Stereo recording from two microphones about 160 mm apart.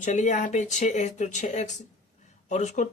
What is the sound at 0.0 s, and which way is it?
Speech, 50° left (ahead or behind).